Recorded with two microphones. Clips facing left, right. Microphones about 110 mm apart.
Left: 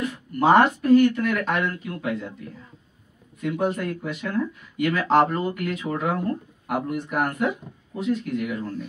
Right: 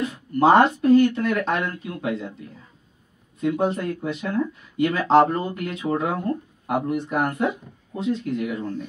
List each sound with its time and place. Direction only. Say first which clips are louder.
0.4 s speech: right 2 dB; 25° right (ahead or behind)
3.3 s speech: right 2 dB; 30° right (ahead or behind)